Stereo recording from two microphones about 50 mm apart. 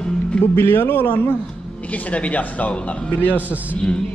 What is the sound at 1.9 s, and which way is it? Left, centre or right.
Speech, left.